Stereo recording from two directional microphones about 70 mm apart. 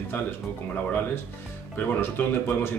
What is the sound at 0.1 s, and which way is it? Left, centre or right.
Speech, left.